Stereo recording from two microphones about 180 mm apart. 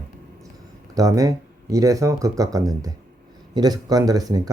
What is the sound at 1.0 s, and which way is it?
Speech, 20° right (ahead or behind).